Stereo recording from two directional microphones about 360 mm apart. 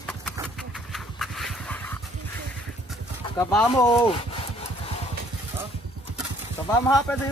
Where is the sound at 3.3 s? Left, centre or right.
Centre.